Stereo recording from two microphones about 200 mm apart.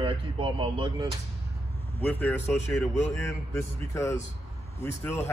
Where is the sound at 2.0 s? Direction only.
10° left (ahead or behind).